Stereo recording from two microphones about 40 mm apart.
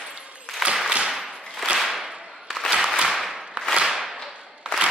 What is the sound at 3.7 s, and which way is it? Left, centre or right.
Whip, centre.